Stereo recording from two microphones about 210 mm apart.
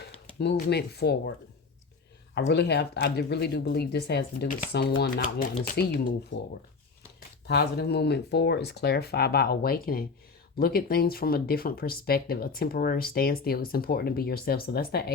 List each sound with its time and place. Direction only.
0.3 s speech: 50° left (ahead or behind)
2.5 s speech: 50° left (ahead or behind)
7.2 s speech: 50° left (ahead or behind)